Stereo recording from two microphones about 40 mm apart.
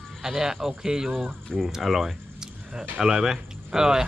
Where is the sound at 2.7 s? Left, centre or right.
Centre.